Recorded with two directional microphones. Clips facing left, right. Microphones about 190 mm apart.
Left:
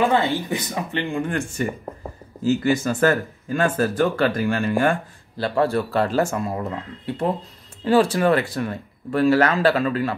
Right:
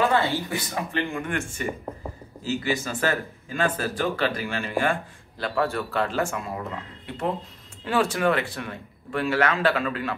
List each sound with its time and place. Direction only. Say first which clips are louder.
0.1 s speech: left 3 dB; 20° left (ahead or behind)
2.4 s speech: left 7 dB; 45° left (ahead or behind)
5.4 s speech: left 5 dB; 35° left (ahead or behind)
7.8 s speech: left 6 dB; 35° left (ahead or behind)